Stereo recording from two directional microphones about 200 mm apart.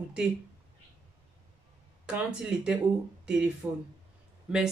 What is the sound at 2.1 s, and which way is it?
A woman's voice, 5° right (ahead or behind).